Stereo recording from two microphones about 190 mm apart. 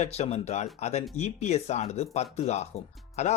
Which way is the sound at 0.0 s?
35° left (ahead or behind).